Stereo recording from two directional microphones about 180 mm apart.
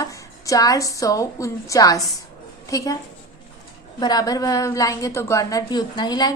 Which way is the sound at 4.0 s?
20° left (ahead or behind).